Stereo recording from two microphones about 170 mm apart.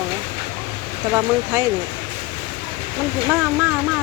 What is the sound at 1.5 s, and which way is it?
Speech, 20° right (ahead or behind).